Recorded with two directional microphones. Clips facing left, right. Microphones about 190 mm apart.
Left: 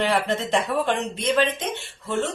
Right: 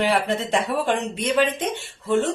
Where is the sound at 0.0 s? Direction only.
10° right (ahead or behind).